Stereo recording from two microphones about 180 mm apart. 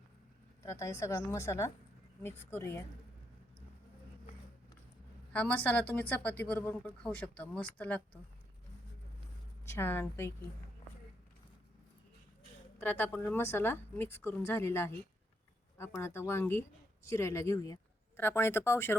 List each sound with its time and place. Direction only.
0.6 s speech: 15° left (ahead or behind)
5.3 s speech: 10° left (ahead or behind)
9.6 s speech: 15° left (ahead or behind)
12.8 s speech: 10° left (ahead or behind)
16.0 s speech: 15° left (ahead or behind)